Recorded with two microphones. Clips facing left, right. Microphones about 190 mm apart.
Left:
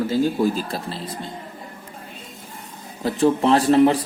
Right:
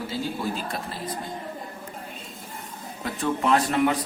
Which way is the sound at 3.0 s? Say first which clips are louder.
Left 8 dB; 30° left (ahead or behind).